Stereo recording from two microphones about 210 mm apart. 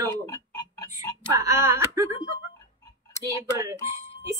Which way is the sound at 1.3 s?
15° right (ahead or behind).